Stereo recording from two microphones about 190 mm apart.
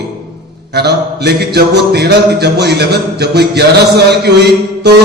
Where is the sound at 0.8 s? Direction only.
60° right (ahead or behind).